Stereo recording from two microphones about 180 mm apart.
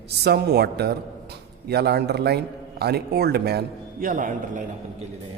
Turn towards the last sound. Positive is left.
turn(degrees=-50)  # may be behind; listen again after turning